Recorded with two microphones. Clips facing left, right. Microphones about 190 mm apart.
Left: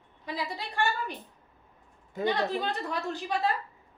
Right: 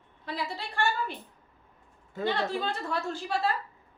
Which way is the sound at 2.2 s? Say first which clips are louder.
Left 1 dB; 15° left (ahead or behind).